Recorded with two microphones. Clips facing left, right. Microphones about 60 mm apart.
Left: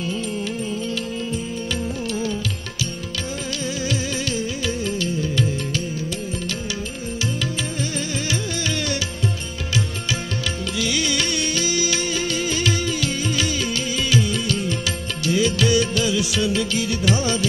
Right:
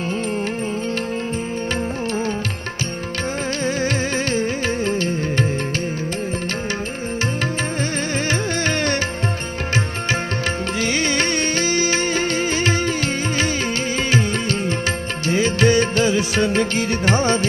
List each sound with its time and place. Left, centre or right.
3.6 s music: right
8.3 s music: right
10.8 s music: right